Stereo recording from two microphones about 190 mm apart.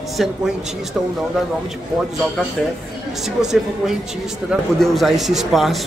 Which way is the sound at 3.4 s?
5° right (ahead or behind).